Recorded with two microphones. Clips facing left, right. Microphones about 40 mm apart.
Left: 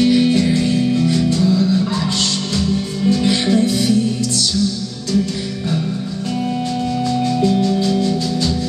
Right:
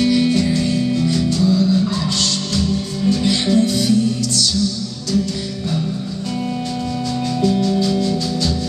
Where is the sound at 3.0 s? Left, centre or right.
Left.